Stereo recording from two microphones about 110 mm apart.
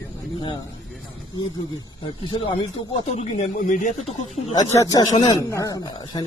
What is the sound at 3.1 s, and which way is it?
Speech, 80° left.